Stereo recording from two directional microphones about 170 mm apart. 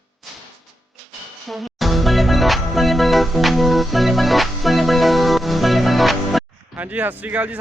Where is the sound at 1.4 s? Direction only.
Centre (ahead or behind).